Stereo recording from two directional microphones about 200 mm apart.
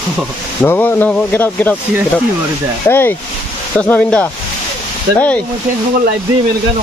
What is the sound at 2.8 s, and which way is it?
Speech, 10° left (ahead or behind).